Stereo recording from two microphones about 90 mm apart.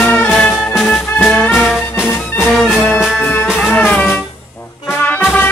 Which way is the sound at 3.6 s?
15° left (ahead or behind).